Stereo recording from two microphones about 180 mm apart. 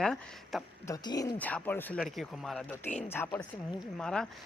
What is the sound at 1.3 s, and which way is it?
Speech, 10° left (ahead or behind).